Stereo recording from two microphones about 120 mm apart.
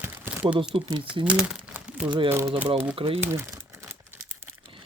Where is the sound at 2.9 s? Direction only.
50° right (ahead or behind).